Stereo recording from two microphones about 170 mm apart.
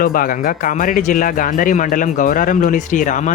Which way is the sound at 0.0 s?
55° left (ahead or behind).